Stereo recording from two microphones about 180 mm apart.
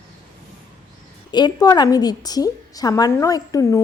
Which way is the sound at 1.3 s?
20° left (ahead or behind).